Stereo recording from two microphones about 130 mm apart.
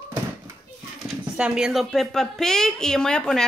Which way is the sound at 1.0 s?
5° right (ahead or behind).